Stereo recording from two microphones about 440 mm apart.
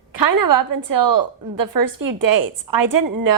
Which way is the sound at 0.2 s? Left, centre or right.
Right.